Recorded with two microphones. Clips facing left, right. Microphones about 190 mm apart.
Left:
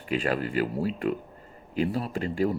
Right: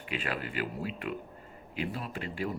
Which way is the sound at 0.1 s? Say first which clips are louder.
Left 9 dB; 40° left (ahead or behind).